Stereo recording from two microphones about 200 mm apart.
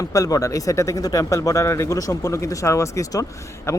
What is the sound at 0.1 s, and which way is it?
Speech, 15° left (ahead or behind).